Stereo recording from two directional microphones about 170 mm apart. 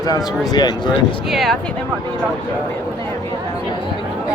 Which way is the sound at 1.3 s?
Centre (ahead or behind).